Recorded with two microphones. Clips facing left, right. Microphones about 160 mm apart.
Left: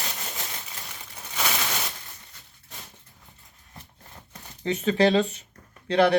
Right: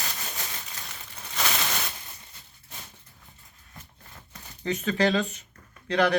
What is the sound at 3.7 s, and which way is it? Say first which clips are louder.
Shuffling cards: left 2 dB; 25° left (ahead or behind).